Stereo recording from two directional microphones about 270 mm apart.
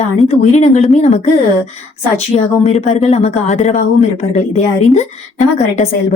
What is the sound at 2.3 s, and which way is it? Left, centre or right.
A woman's voice, left.